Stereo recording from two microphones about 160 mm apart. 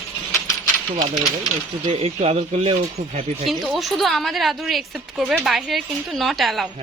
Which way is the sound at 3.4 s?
Centre (ahead or behind).